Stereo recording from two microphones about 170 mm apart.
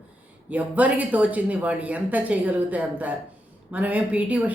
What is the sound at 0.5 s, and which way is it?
Speech, 10° right (ahead or behind).